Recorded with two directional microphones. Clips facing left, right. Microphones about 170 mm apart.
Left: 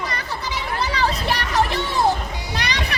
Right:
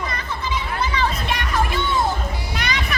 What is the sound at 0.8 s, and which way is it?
Children playing, 35° left (ahead or behind).